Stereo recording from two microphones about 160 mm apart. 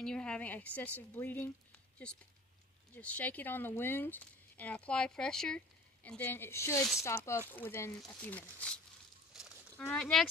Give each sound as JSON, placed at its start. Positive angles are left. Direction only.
{"t": 0.0, "sound": "speech", "side_deg": 5}
{"t": 3.0, "sound": "speech", "side_deg": 10}
{"t": 9.3, "sound": "livestock", "side_deg": 0}
{"t": 9.8, "sound": "speech", "side_deg": 10}